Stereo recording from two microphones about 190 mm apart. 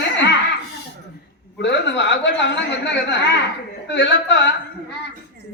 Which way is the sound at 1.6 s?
65° left (ahead or behind).